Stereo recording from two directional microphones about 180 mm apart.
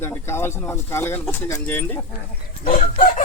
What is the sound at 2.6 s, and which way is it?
Chicken, 45° left (ahead or behind).